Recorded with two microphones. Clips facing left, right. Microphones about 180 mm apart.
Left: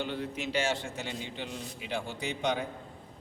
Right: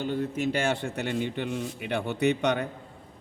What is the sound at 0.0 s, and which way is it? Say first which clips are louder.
A man's voice: right 6 dB; 45° right (ahead or behind).